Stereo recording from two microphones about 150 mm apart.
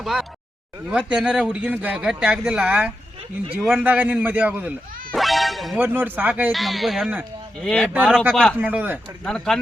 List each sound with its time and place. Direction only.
0.0 s speech: centre (ahead or behind)
5.1 s speech: centre (ahead or behind)
5.8 s speech: 15° right (ahead or behind)
6.5 s speech: centre (ahead or behind)
7.9 s speech: 5° right (ahead or behind)
8.5 s speech: 10° right (ahead or behind)
9.2 s speech: 5° left (ahead or behind)